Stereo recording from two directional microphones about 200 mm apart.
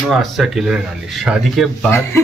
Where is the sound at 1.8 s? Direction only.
10° left (ahead or behind).